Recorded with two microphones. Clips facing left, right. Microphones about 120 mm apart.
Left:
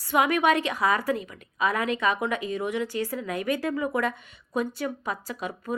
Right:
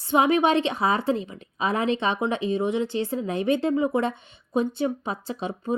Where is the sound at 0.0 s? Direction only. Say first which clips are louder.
Right 3 dB; 25° right (ahead or behind).